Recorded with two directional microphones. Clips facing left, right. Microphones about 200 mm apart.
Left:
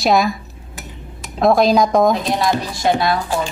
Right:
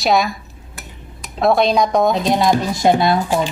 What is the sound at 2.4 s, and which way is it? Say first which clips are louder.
Speech: right 3 dB; 20° right (ahead or behind).